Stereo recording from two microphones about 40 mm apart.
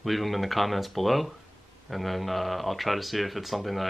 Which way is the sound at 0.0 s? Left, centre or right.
Centre.